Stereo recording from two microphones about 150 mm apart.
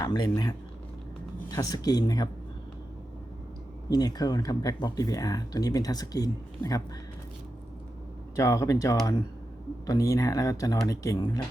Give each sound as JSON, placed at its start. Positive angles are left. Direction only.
{"t": 0.0, "sound": "speech", "side_deg": 25}
{"t": 3.8, "sound": "speech", "side_deg": 25}
{"t": 8.4, "sound": "speech", "side_deg": 20}